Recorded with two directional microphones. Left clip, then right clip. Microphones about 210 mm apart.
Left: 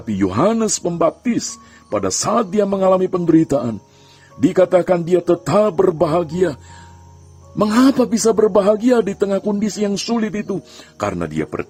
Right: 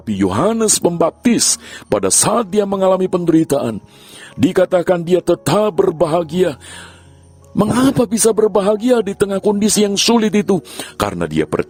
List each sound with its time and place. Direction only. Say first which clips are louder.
0.0 s speech: right 1 dB; 50° right (ahead or behind)
7.8 s speech: even; 50° right (ahead or behind)